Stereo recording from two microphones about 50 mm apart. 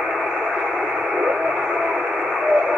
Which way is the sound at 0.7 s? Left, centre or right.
Centre.